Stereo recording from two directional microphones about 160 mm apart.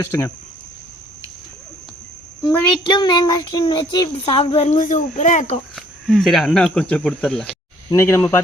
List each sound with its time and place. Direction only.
0.0 s speech: 15° left (ahead or behind)
2.8 s child singing: 25° left (ahead or behind); by 5.5 s 50° left (ahead or behind)
5.7 s speech: centre (ahead or behind)
7.9 s speech: 15° left (ahead or behind)